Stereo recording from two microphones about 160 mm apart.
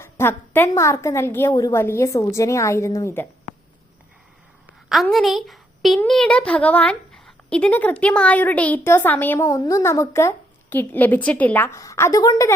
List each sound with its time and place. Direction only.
0.0 s a woman's voice: 15° left (ahead or behind)
4.9 s a woman's voice: centre (ahead or behind); by 12.5 s 20° left (ahead or behind)